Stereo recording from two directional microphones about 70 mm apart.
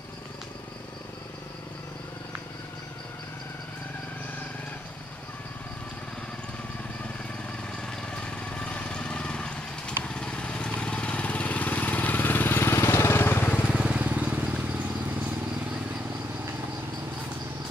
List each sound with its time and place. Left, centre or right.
7.8 s vehicle: centre; by 13.5 s left
13.7 s vehicle: centre
13.9 s vehicle: right